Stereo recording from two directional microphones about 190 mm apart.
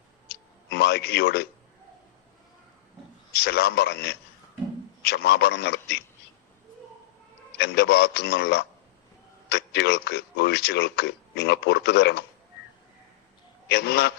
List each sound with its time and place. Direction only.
0.3 s a sound: 60° left (ahead or behind)
3.3 s a man's voice: 55° left (ahead or behind)
7.6 s a man's voice: 55° left (ahead or behind)
13.7 s a man's voice: 60° left (ahead or behind)